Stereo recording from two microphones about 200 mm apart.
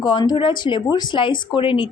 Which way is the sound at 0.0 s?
20° left (ahead or behind).